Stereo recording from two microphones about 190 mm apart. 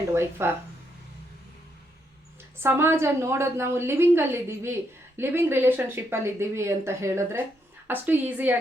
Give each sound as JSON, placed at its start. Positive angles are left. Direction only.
{"t": 0.1, "sound": "a woman's voice", "side_deg": -10}
{"t": 2.6, "sound": "a woman's voice", "side_deg": -15}